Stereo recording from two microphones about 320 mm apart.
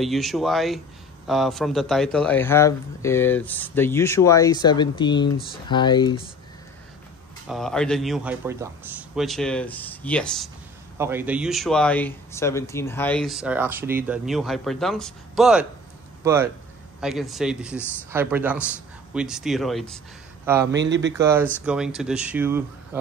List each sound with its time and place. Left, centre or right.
0.0 s a man's voice: centre
7.4 s speech: centre
20.7 s speech: right
21.2 s speech: centre